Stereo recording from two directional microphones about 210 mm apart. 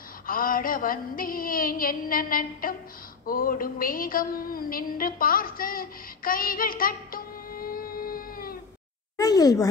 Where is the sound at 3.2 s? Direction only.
45° left (ahead or behind).